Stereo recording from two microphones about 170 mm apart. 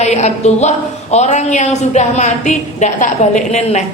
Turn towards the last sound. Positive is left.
turn(degrees=40)  # may be behind; listen again after turning